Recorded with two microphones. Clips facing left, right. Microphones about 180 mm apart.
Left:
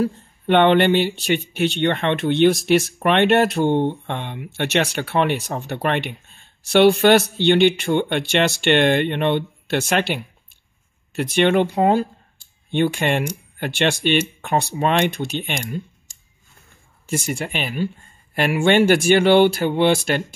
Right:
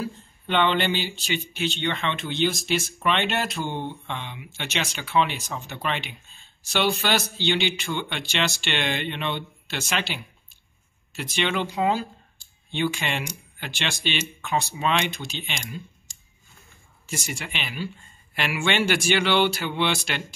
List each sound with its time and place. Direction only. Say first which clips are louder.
0.0 s speech: left 10 dB; 60° left (ahead or behind)
17.1 s speech: left 9 dB; 50° left (ahead or behind)